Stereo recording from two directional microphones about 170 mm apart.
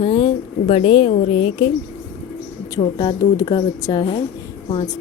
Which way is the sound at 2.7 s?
25° left (ahead or behind).